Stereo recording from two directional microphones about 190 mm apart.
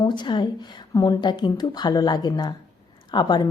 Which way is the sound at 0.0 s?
25° left (ahead or behind).